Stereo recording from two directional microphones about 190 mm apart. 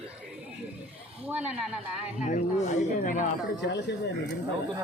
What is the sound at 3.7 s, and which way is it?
Speech, 65° left (ahead or behind).